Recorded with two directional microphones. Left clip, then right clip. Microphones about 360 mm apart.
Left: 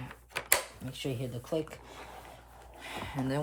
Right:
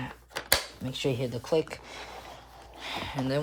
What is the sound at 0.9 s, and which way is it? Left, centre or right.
Speech, right.